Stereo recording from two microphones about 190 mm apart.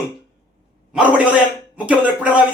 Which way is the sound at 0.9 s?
5° right (ahead or behind).